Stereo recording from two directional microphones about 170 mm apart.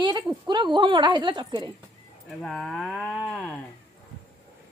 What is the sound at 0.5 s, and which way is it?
A woman's voice, 25° right (ahead or behind).